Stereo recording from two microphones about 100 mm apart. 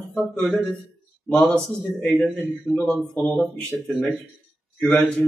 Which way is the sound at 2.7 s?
10° left (ahead or behind).